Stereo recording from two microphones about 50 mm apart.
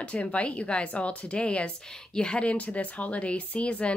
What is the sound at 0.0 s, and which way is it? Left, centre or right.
Speech, left.